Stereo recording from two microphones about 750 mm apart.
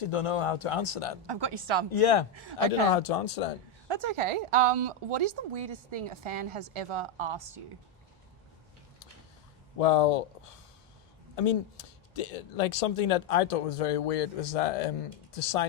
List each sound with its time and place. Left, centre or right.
0.0 s speech: left
1.3 s a woman's voice: right
1.9 s speech: left
3.8 s a woman's voice: right
9.7 s speech: left